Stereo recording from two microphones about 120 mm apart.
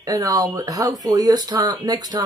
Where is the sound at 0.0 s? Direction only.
30° right (ahead or behind).